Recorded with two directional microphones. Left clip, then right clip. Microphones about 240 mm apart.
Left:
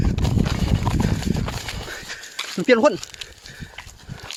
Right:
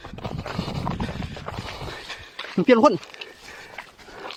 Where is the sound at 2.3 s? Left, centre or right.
Left.